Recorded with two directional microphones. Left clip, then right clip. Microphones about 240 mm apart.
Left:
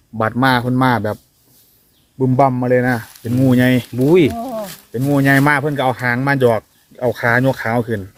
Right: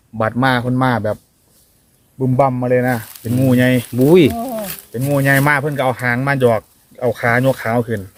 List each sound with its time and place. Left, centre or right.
0.2 s speech: left
3.9 s frying: right
4.4 s a sound: right
4.9 s speech: left